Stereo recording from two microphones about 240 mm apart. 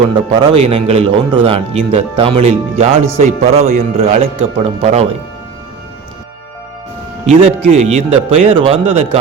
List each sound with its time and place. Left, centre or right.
0.1 s a man's voice: centre
7.3 s a man's voice: right